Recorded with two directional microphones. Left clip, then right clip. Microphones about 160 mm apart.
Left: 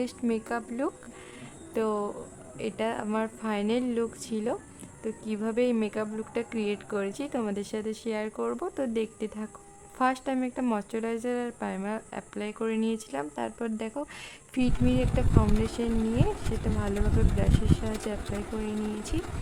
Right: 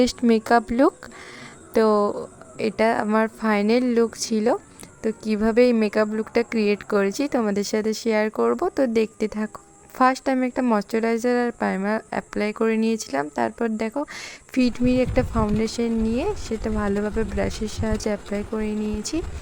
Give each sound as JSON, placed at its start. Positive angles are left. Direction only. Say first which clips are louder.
{"t": 0.0, "sound": "a woman's voice", "louder": "right 11 dB", "side_deg": -50}